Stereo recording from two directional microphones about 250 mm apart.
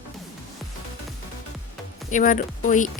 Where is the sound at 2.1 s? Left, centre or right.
Left.